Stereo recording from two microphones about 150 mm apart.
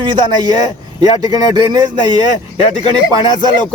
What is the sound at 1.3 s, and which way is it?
Speech, 25° right (ahead or behind).